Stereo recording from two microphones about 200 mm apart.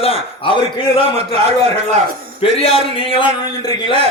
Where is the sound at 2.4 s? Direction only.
30° left (ahead or behind).